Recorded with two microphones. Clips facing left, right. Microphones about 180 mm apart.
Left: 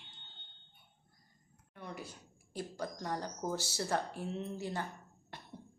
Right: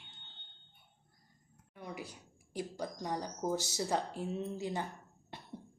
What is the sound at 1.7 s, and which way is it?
A woman's voice, 10° right (ahead or behind).